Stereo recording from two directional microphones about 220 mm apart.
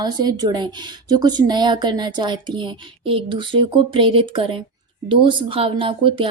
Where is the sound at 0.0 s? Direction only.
20° right (ahead or behind).